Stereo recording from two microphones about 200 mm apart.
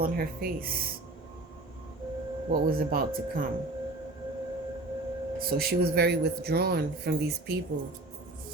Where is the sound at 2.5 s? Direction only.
45° right (ahead or behind).